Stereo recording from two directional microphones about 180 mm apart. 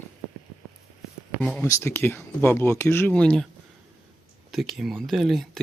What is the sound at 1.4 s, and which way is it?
Speech, 5° left (ahead or behind).